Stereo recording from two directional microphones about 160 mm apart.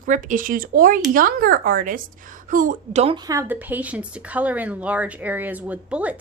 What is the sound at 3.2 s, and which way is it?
A woman's voice, 15° right (ahead or behind).